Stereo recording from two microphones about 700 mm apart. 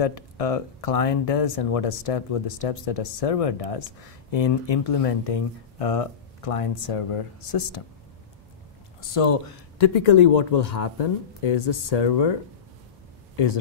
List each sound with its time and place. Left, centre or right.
0.0 s speech: left
9.1 s speech: left